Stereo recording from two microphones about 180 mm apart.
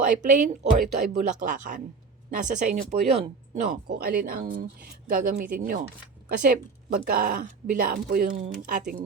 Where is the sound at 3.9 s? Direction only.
60° right (ahead or behind).